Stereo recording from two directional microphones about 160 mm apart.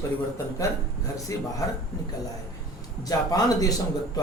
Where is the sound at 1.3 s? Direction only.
20° left (ahead or behind).